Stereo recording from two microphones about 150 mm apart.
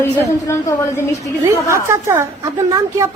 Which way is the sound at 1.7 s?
20° right (ahead or behind).